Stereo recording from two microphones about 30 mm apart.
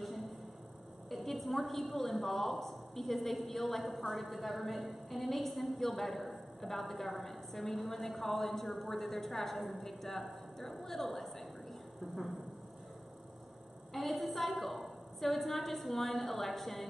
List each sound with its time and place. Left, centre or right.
0.0 s a sound: centre
1.1 s a woman's voice: centre
13.9 s a woman's voice: centre